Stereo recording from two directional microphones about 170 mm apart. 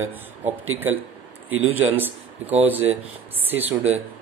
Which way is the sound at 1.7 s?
10° right (ahead or behind).